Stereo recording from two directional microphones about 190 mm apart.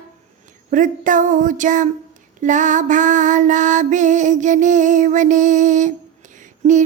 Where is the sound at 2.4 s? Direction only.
40° right (ahead or behind).